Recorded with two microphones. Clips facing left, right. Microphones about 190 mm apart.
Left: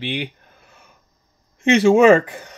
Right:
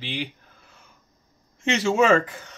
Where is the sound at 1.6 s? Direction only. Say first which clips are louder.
Left 8 dB; 60° left (ahead or behind).